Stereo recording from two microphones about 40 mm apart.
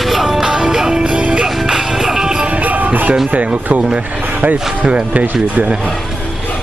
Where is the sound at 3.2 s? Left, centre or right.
Right.